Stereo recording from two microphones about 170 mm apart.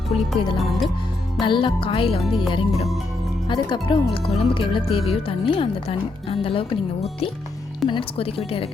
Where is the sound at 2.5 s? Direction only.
30° left (ahead or behind).